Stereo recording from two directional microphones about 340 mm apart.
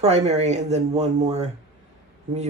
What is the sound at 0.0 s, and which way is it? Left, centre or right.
Speech, centre.